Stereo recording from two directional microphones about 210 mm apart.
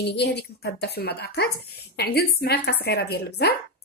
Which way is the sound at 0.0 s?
55° left (ahead or behind).